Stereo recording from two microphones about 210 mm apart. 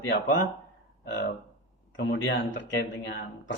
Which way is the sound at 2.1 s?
60° left (ahead or behind).